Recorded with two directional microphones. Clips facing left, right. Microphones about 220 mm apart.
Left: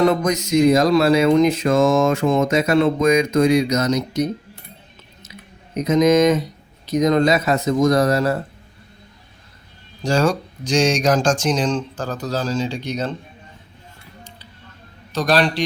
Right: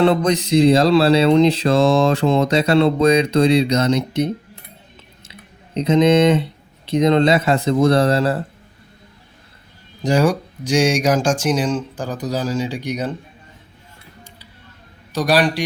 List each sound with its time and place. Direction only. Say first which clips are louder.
0.0 s music: right 2 dB; 30° right (ahead or behind)
5.8 s speech: right 1 dB; 30° right (ahead or behind)
10.0 s speech: right 2 dB; 15° right (ahead or behind)
15.1 s speech: right 1 dB; 10° right (ahead or behind)